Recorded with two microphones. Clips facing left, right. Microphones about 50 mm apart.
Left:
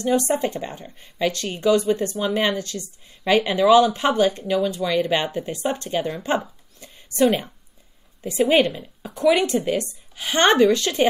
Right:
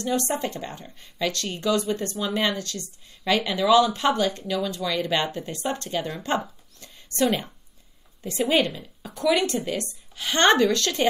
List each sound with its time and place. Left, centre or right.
0.2 s a woman's voice: left
8.5 s a woman's voice: left